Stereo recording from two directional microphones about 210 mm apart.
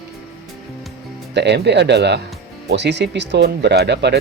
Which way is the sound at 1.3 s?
55° right (ahead or behind).